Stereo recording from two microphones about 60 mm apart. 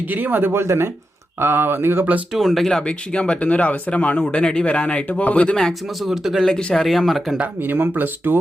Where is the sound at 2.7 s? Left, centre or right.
Centre.